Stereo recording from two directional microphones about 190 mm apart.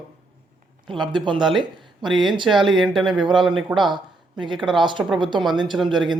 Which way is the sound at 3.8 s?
25° right (ahead or behind).